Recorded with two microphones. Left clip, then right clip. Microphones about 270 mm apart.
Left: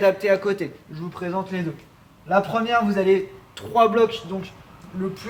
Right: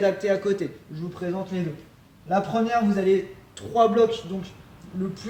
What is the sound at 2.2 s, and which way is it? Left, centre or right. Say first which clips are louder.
A man's voice: left 3 dB; centre.